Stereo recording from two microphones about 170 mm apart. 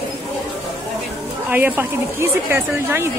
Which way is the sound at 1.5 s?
10° right (ahead or behind).